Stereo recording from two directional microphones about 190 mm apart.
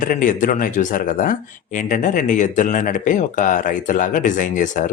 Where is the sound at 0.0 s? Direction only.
45° left (ahead or behind).